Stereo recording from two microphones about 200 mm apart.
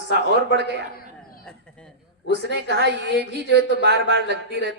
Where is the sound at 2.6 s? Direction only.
55° right (ahead or behind).